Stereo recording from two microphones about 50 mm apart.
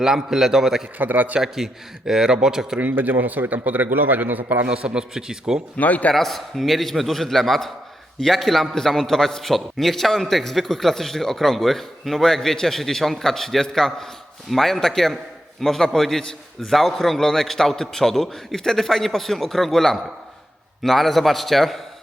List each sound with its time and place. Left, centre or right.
0.0 s a man's voice: centre
0.9 s a man's voice: right
1.4 s a man's voice: centre
2.9 s a man's voice: right
4.7 s a man's voice: centre
5.7 s speech: left
6.1 s a man's voice: centre